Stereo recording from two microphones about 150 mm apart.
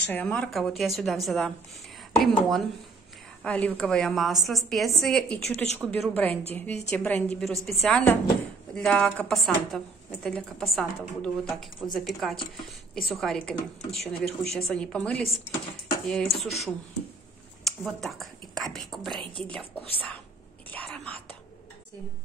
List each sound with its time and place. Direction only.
0.0 s a woman's voice: 10° left (ahead or behind)
20.7 s speech: 10° left (ahead or behind)